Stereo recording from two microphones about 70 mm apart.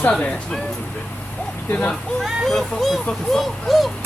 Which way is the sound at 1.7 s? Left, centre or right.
Centre.